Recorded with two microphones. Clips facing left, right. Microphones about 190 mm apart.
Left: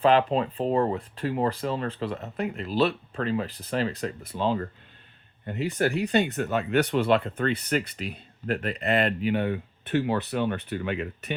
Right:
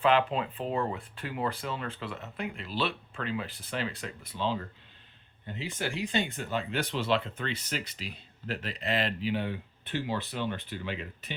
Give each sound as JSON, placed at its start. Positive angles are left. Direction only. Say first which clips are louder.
{"t": 0.0, "sound": "speech", "louder": "left 5 dB", "side_deg": 40}
{"t": 5.5, "sound": "speech", "louder": "left 9 dB", "side_deg": 60}